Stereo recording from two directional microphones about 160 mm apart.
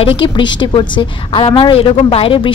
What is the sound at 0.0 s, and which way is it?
A woman's voice, 30° left (ahead or behind).